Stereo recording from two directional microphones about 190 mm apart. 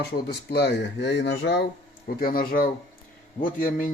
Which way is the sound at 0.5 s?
65° left (ahead or behind).